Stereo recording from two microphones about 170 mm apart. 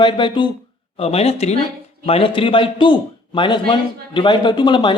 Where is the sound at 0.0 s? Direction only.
30° left (ahead or behind).